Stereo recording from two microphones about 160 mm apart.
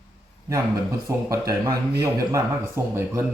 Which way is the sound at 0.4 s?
20° right (ahead or behind).